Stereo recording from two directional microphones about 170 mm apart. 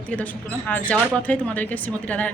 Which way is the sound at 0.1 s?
10° left (ahead or behind).